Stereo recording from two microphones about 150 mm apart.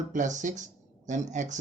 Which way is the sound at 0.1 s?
55° right (ahead or behind).